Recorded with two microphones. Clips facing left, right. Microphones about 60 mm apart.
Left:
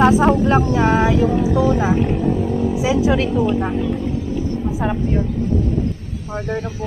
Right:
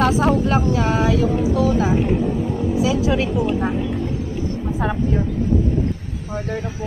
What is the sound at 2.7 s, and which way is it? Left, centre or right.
Speech, left.